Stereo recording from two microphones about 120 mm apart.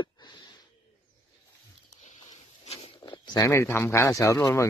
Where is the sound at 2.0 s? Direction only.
70° left (ahead or behind).